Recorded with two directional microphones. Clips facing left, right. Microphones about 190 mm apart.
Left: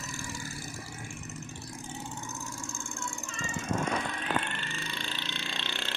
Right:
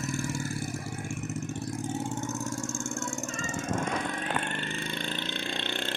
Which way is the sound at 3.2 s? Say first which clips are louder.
Right 4 dB; 45° right (ahead or behind).